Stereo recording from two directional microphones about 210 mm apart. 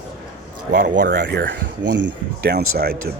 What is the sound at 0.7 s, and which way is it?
Speech, 40° right (ahead or behind).